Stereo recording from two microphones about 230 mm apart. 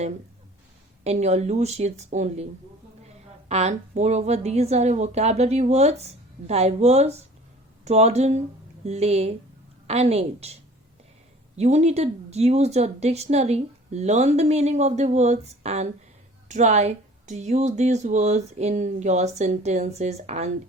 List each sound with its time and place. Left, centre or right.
1.0 s a woman's voice: right